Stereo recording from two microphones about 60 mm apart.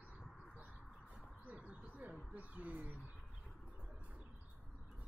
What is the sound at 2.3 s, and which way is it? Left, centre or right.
Speech, right.